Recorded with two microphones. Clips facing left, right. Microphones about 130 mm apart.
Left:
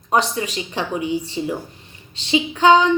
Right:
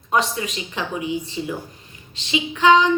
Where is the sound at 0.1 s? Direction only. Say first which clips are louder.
Left 2 dB; 35° left (ahead or behind).